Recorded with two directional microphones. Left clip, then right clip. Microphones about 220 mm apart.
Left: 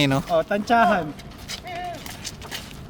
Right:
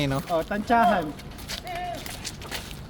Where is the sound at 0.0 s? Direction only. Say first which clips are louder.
Left 5 dB; 40° left (ahead or behind).